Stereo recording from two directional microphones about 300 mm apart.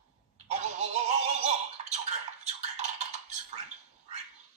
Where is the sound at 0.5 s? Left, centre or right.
Right.